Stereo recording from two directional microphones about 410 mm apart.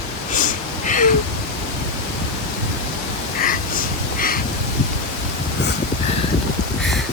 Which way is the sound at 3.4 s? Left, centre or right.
Centre.